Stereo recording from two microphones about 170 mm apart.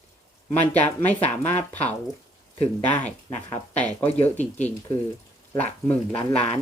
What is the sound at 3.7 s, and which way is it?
Speech, 10° left (ahead or behind).